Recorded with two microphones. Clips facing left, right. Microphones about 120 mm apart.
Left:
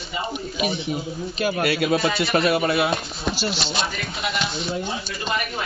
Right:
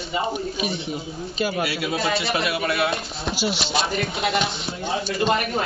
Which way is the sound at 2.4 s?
25° left (ahead or behind).